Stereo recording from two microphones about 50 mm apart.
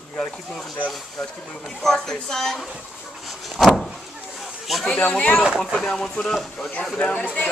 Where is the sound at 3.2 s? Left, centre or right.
Centre.